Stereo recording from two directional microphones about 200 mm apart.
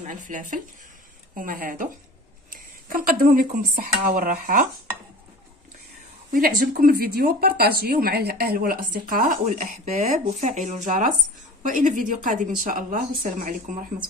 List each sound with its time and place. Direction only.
0.0 s speech: 40° right (ahead or behind)
6.3 s speech: 50° right (ahead or behind)